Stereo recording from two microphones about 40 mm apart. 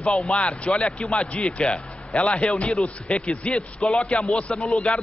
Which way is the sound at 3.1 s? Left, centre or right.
Left.